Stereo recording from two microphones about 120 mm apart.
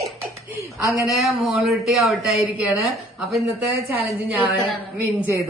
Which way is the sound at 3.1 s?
Centre (ahead or behind).